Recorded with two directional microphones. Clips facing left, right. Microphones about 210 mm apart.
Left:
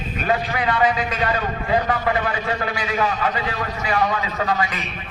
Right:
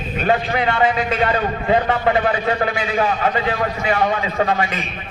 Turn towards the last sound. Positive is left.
turn(degrees=-25)  # may be behind; listen again after turning